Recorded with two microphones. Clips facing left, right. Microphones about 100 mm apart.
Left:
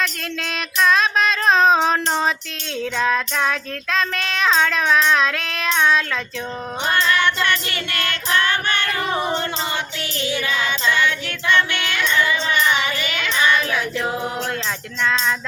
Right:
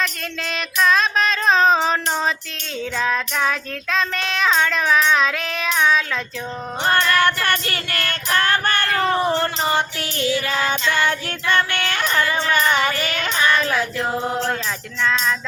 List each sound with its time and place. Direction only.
0.0 s a sound: centre (ahead or behind)
1.9 s child singing: centre (ahead or behind)
3.0 s music: centre (ahead or behind)
3.9 s child singing: centre (ahead or behind)
7.2 s music: 40° right (ahead or behind)
12.5 s child singing: 40° right (ahead or behind)